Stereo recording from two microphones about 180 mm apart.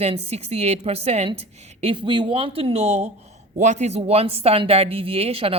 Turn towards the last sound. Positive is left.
turn(degrees=-35)  # may be behind; listen again after turning